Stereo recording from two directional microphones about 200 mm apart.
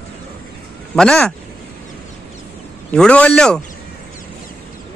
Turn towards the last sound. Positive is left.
turn(degrees=5)  # may be behind; listen again after turning